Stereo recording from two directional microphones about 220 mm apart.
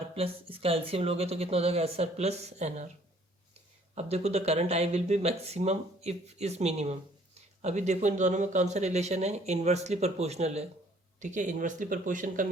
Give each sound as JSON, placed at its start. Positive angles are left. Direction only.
{"t": 0.2, "sound": "speech", "side_deg": -25}